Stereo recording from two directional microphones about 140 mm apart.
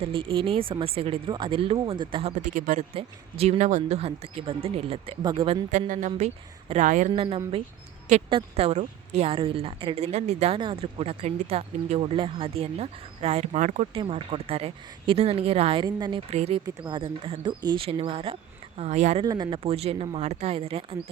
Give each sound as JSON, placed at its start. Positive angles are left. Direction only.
{"t": 0.0, "sound": "speech", "side_deg": -40}
{"t": 2.3, "sound": "speech", "side_deg": -70}
{"t": 2.9, "sound": "speech", "side_deg": -45}
{"t": 5.9, "sound": "speech", "side_deg": -55}
{"t": 7.1, "sound": "speech", "side_deg": -40}
{"t": 10.6, "sound": "speech", "side_deg": -40}
{"t": 13.9, "sound": "speech", "side_deg": -40}
{"t": 16.3, "sound": "speech", "side_deg": -50}
{"t": 16.6, "sound": "speech", "side_deg": -30}
{"t": 18.8, "sound": "speech", "side_deg": -55}
{"t": 19.2, "sound": "speech", "side_deg": -25}
{"t": 19.5, "sound": "speech", "side_deg": -40}